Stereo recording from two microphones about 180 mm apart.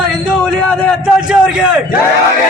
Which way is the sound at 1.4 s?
5° right (ahead or behind).